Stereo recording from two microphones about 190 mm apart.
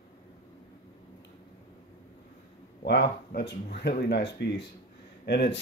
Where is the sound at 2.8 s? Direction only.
60° left (ahead or behind).